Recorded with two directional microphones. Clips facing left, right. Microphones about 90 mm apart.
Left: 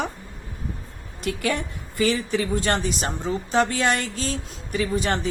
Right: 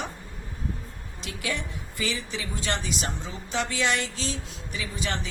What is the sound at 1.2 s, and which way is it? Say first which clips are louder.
A woman's voice: left 7 dB; 55° left (ahead or behind).